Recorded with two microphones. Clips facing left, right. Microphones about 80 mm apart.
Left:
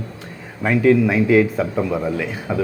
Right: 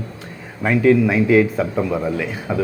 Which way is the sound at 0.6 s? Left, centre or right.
Right.